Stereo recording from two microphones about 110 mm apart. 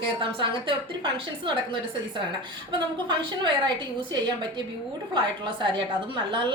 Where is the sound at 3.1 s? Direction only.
40° right (ahead or behind).